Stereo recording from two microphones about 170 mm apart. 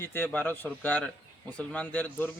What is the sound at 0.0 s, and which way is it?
Speech, 15° left (ahead or behind).